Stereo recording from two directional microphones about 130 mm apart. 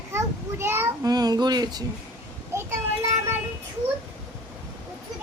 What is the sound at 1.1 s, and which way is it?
Speech, 30° right (ahead or behind).